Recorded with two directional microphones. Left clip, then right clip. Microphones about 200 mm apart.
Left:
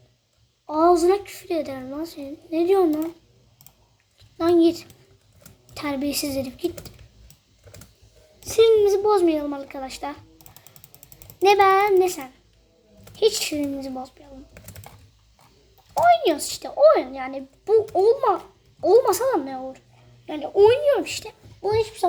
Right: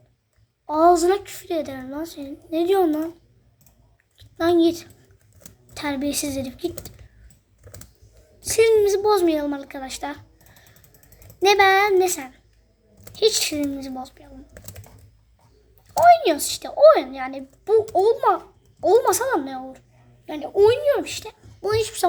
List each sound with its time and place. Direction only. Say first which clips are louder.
0.7 s a child's voice: right 1 dB; 10° right (ahead or behind)
4.4 s a woman's voice: even; 5° right (ahead or behind)
8.4 s a child's voice: even; 10° right (ahead or behind)
11.3 s a child's voice: even; 10° right (ahead or behind)
16.0 s a child's voice: right 3 dB; 10° right (ahead or behind)
21.6 s a child's voice: even; 25° right (ahead or behind)